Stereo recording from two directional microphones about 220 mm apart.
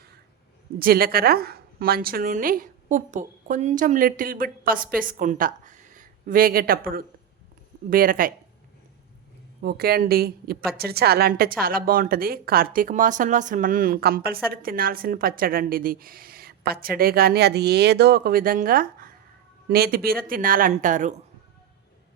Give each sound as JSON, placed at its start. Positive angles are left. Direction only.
{"t": 0.8, "sound": "a woman's voice", "side_deg": -40}
{"t": 9.6, "sound": "a woman's voice", "side_deg": -45}